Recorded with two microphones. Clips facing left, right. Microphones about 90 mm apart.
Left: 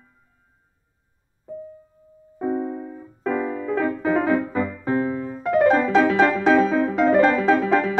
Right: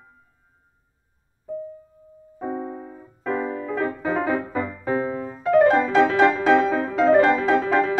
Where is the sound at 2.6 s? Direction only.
Centre (ahead or behind).